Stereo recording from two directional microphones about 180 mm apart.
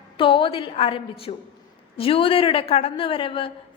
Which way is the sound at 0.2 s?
30° left (ahead or behind).